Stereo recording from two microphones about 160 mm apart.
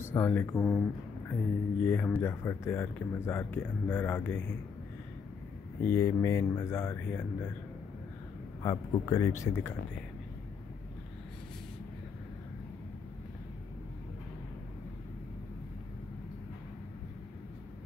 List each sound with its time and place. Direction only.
0.0 s speech: 15° left (ahead or behind)
5.9 s speech: 20° left (ahead or behind)
8.6 s speech: 20° left (ahead or behind)